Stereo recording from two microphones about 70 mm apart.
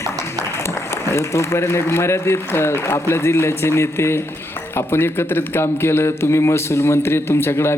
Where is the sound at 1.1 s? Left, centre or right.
Left.